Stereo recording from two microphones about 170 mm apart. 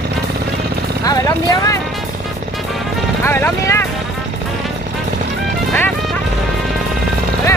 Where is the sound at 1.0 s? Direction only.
20° left (ahead or behind).